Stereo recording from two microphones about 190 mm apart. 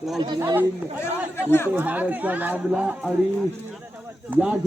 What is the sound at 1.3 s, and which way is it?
Speech, 10° left (ahead or behind).